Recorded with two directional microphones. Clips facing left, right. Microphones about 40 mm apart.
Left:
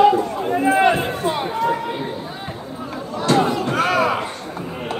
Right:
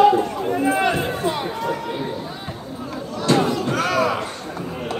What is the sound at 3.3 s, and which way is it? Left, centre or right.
Music, centre.